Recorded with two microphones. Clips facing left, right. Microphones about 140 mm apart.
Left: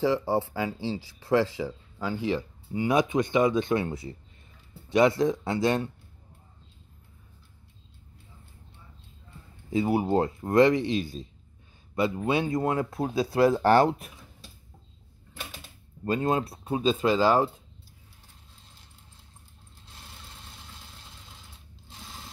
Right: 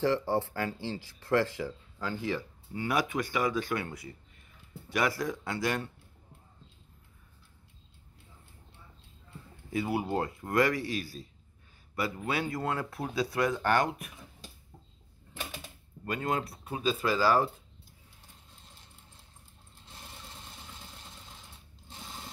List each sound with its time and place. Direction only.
0.0 s speech: 10° left (ahead or behind)
9.7 s speech: 25° left (ahead or behind)
16.1 s speech: 25° left (ahead or behind)